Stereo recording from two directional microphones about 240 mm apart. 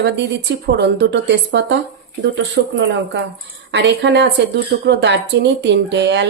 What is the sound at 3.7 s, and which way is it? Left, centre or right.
A woman's voice, right.